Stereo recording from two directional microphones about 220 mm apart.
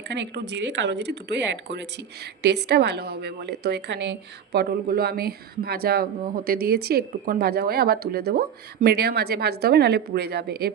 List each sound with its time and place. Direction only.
0.1 s a woman's voice: 50° right (ahead or behind)